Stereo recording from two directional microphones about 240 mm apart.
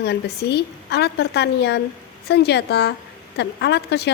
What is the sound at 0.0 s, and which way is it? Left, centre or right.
A woman's voice, left.